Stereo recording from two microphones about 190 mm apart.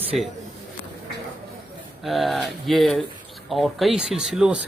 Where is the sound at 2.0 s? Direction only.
Centre (ahead or behind).